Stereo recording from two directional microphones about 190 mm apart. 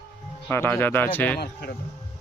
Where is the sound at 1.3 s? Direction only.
55° left (ahead or behind).